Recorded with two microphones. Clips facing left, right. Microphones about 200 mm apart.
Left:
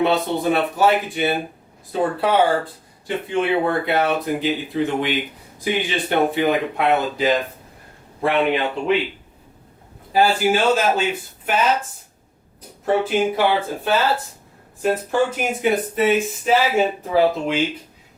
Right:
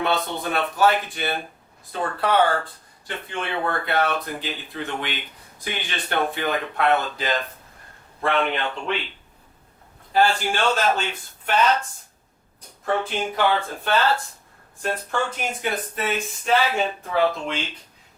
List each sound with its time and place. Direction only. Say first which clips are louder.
0.4 s speech: left 2 dB; 10° left (ahead or behind)
10.1 s speech: left 4 dB; 5° left (ahead or behind)
12.8 s speech: left 6 dB; 5° left (ahead or behind)